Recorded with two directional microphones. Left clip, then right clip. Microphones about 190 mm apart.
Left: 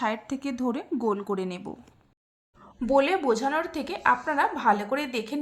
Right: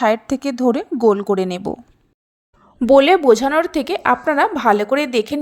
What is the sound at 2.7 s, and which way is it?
A woman's voice, 40° right (ahead or behind).